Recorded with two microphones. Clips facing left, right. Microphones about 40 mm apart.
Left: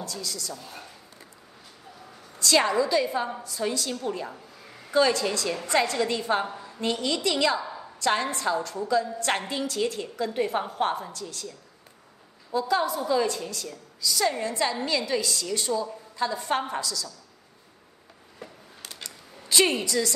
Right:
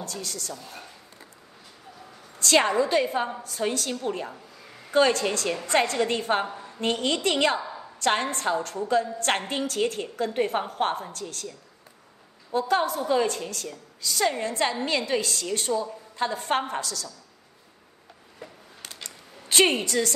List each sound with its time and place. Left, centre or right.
0.0 s a woman's voice: right
0.6 s speech: centre
2.3 s a woman's voice: right
4.3 s a sound: centre
4.9 s a woman's voice: right
7.6 s a sound: centre
8.0 s a woman's voice: right
12.5 s a woman's voice: right
18.8 s a sound: right
19.5 s a woman's voice: right